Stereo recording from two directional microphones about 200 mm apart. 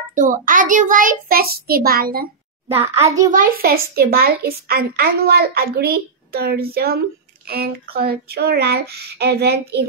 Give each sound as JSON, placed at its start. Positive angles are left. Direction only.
{"t": 0.1, "sound": "a child's voice", "side_deg": -40}
{"t": 2.7, "sound": "a child's voice", "side_deg": -10}
{"t": 3.3, "sound": "a child's voice", "side_deg": -45}